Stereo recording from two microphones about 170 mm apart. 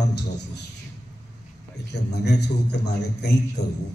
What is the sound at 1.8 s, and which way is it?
A man's voice, 80° left.